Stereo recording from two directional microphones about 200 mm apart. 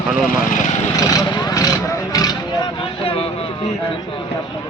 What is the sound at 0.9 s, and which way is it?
Vehicle, 15° left (ahead or behind).